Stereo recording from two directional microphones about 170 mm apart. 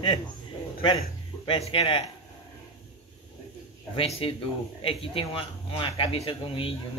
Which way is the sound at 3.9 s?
35° left (ahead or behind).